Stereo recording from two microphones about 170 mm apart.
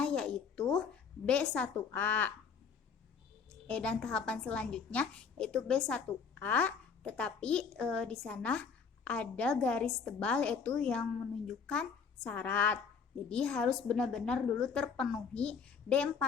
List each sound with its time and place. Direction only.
0.0 s a sound: 5° left (ahead or behind)
0.7 s a woman's voice: 5° left (ahead or behind)
3.7 s a woman's voice: 5° left (ahead or behind)